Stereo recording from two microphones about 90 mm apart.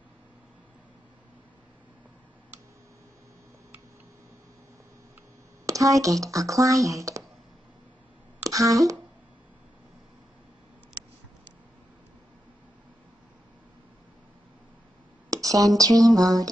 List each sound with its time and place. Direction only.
5.7 s speech: 40° right (ahead or behind)
8.5 s speech: 40° right (ahead or behind)
15.2 s speech: 40° right (ahead or behind)